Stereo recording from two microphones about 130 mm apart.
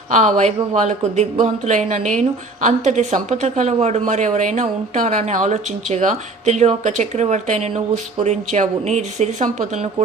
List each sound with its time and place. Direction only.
0.1 s speech: 70° right (ahead or behind)